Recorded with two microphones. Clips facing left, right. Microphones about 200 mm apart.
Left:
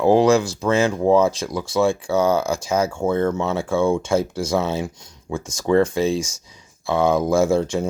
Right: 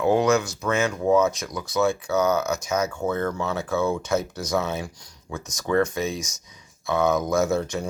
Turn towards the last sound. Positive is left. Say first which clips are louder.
# left 5 dB
turn(degrees=25)  # may be behind; listen again after turning